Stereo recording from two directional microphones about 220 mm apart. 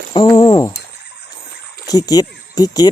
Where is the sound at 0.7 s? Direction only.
50° left (ahead or behind).